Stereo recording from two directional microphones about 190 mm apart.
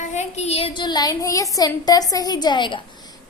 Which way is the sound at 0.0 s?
40° left (ahead or behind).